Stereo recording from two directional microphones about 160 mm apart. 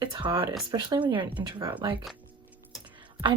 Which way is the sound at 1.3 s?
15° right (ahead or behind).